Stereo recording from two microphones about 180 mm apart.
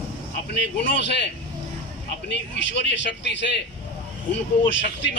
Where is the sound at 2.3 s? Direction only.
75° left (ahead or behind).